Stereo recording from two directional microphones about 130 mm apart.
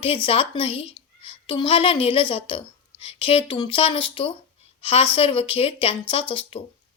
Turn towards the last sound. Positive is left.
turn(degrees=45)  # may be behind; listen again after turning